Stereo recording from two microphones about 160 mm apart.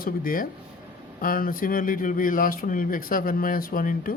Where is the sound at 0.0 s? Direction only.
65° left (ahead or behind).